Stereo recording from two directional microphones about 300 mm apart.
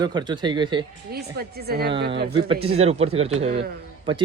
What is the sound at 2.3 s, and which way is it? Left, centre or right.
Speech, centre.